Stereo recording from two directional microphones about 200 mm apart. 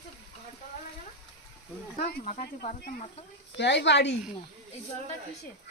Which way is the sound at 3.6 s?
60° left (ahead or behind).